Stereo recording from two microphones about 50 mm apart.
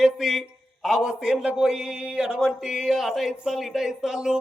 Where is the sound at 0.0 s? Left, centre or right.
Centre.